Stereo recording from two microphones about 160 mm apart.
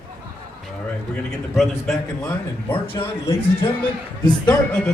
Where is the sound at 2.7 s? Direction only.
35° left (ahead or behind).